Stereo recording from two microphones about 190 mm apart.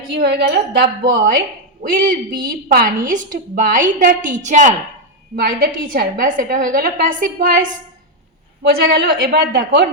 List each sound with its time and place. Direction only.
0.1 s a woman's voice: 60° right (ahead or behind)
1.8 s a woman's voice: 45° right (ahead or behind)
8.9 s a woman's voice: 60° right (ahead or behind)